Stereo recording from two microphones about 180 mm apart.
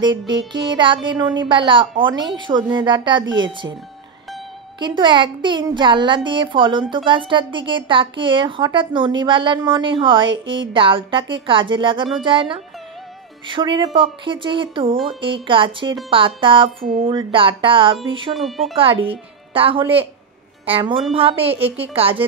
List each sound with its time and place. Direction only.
0.3 s a woman's voice: 25° right (ahead or behind)
4.7 s a woman's voice: 25° right (ahead or behind)
18.3 s wind chime: centre (ahead or behind)
18.8 s a woman's voice: 30° right (ahead or behind)